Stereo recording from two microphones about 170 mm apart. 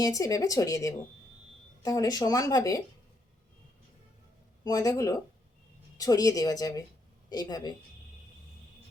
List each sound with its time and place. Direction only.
0.0 s speech: 20° left (ahead or behind)
4.6 s speech: 20° left (ahead or behind)